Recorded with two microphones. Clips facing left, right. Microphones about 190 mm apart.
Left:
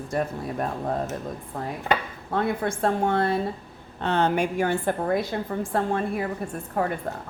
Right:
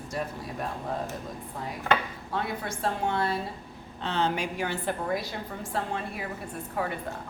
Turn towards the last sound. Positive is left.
turn(degrees=50)  # may be behind; listen again after turning